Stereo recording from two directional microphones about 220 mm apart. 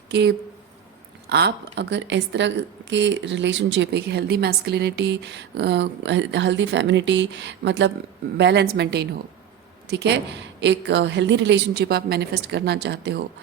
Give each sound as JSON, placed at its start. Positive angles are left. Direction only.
{"t": 0.1, "sound": "a woman's voice", "side_deg": -50}